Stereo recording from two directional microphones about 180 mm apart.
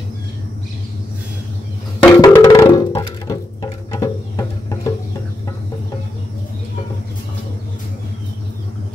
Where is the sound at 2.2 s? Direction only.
20° left (ahead or behind).